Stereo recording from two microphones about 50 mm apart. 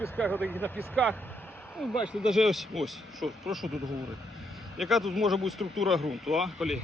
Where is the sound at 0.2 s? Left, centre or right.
Left.